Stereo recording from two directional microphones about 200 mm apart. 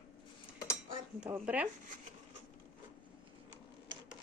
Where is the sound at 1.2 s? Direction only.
5° right (ahead or behind).